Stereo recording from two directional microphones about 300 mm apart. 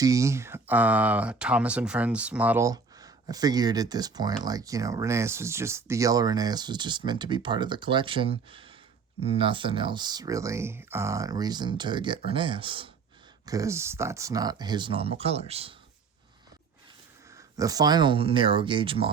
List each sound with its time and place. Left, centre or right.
0.0 s speech: centre
17.3 s speech: centre